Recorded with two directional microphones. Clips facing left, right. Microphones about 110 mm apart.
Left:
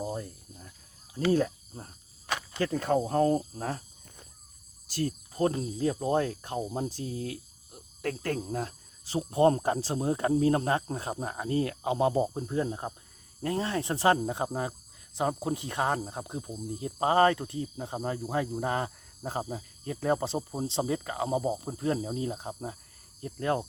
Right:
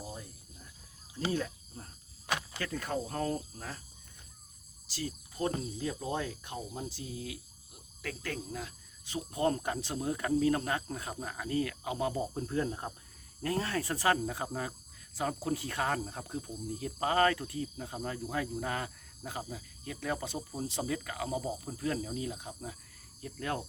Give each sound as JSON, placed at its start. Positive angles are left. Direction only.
{"t": 0.0, "sound": "cricket", "side_deg": 45}
{"t": 1.3, "sound": "cricket", "side_deg": 35}
{"t": 2.2, "sound": "a sound", "side_deg": -10}
{"t": 2.6, "sound": "speech", "side_deg": 30}
{"t": 3.6, "sound": "cricket", "side_deg": 45}
{"t": 4.9, "sound": "speech", "side_deg": 50}